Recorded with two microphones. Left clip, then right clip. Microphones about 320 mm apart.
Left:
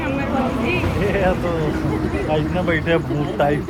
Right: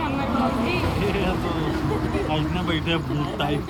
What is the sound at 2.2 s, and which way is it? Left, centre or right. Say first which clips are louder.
Speech: left 5 dB; centre.